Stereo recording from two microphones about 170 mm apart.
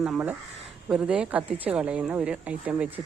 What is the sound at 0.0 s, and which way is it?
Speech, 5° right (ahead or behind).